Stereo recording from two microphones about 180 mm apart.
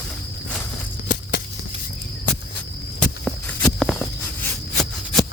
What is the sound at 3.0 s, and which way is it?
Walk, centre (ahead or behind).